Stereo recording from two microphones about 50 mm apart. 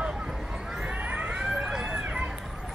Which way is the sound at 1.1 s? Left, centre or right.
Right.